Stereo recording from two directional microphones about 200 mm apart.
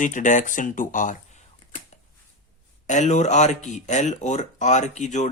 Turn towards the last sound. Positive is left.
turn(degrees=35)  # may be behind; listen again after turning